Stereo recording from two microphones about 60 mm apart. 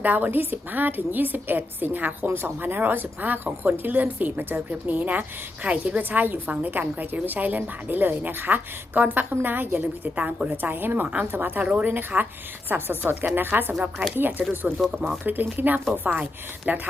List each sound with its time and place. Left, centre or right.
0.0 s a woman's voice: right
11.6 s a woman's voice: right
11.9 s a woman's voice: right
14.7 s a woman's voice: right